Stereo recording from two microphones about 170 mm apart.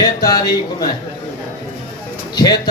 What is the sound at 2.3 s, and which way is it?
Speech, 25° left (ahead or behind).